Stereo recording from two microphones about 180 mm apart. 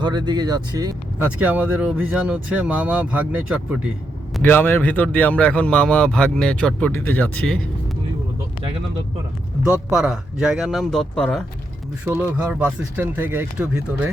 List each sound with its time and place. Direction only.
0.0 s speech: 25° right (ahead or behind)
1.2 s speech: 10° right (ahead or behind)
4.4 s a man's voice: 10° left (ahead or behind)
9.6 s speech: 5° right (ahead or behind)
12.0 s speech: 10° right (ahead or behind)